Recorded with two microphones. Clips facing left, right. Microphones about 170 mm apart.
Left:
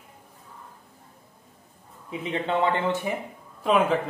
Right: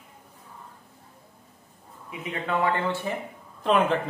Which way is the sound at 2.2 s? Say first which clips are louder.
Left 2 dB; 25° left (ahead or behind).